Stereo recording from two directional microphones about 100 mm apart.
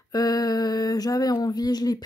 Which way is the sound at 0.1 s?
40° left (ahead or behind).